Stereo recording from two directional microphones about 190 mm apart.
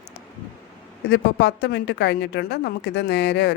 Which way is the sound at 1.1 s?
65° left (ahead or behind).